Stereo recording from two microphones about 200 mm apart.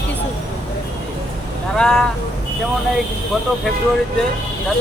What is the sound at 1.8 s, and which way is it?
Speech, centre (ahead or behind).